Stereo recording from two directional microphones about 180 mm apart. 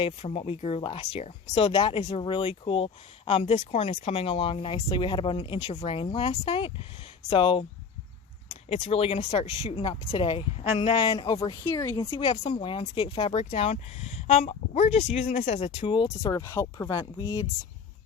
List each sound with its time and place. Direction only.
0.0 s speech: 30° left (ahead or behind)
11.6 s speech: 10° left (ahead or behind)
12.1 s speech: 30° left (ahead or behind)